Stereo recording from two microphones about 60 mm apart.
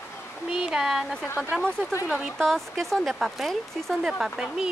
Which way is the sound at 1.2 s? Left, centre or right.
Left.